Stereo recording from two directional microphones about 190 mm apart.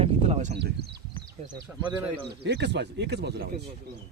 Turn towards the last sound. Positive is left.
turn(degrees=-60)  # may be behind; listen again after turning